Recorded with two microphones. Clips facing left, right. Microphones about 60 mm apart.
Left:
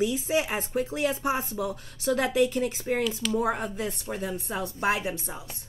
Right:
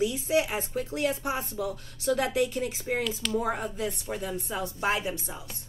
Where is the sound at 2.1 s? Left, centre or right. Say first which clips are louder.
Left 3 dB; left.